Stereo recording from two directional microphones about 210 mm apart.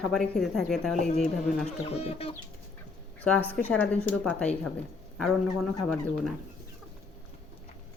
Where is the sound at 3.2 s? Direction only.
5° left (ahead or behind).